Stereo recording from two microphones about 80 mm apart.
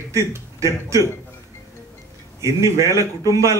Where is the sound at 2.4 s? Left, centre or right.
Right.